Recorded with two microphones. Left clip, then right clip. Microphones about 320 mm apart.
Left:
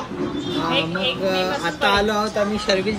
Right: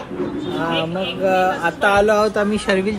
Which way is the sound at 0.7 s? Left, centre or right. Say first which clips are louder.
Even; centre.